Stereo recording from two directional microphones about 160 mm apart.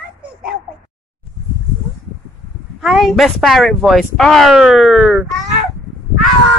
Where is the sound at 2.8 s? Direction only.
Centre (ahead or behind).